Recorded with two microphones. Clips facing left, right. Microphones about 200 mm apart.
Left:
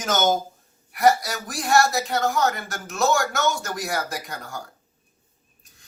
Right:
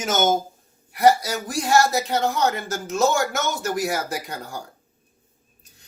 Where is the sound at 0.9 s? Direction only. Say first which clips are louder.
Right 2 dB; 25° right (ahead or behind).